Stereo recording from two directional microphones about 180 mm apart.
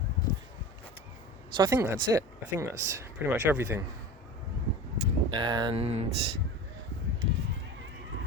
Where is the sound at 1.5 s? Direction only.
20° right (ahead or behind).